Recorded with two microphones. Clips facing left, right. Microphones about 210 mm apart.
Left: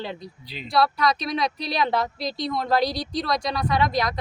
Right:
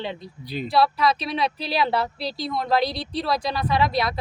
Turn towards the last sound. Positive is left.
turn(degrees=-5)  # may be behind; listen again after turning